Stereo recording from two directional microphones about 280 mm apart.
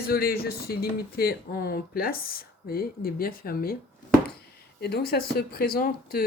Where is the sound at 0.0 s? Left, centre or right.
Left.